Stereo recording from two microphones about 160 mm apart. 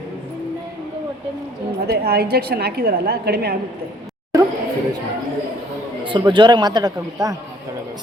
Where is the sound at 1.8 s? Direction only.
75° right (ahead or behind).